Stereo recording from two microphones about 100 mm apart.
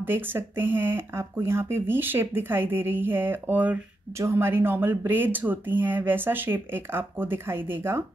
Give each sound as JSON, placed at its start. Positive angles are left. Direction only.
{"t": 0.0, "sound": "speech", "side_deg": -20}